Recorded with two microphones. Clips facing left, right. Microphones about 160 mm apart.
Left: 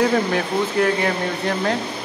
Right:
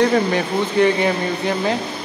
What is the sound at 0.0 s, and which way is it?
Speech, centre (ahead or behind).